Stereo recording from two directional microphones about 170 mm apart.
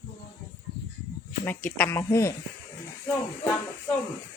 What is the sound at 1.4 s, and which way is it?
Speech, 10° left (ahead or behind).